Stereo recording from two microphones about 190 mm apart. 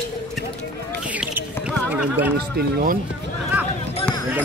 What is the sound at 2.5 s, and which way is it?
Speech, 50° right (ahead or behind).